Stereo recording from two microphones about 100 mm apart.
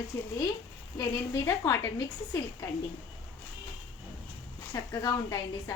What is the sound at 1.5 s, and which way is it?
Speech, 35° left (ahead or behind).